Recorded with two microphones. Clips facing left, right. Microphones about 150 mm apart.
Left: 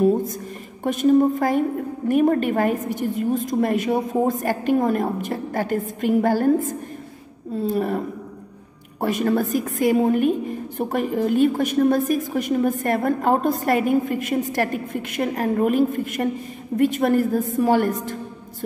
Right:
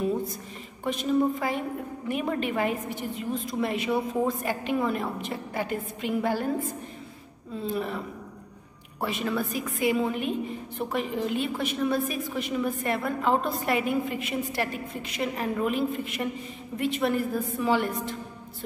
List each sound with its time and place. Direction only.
0.0 s a woman's voice: 45° left (ahead or behind)
7.5 s a woman's voice: 40° left (ahead or behind)
9.0 s a woman's voice: 45° left (ahead or behind)